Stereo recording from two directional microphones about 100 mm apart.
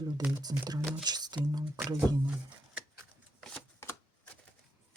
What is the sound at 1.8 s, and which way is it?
Speech, 35° right (ahead or behind).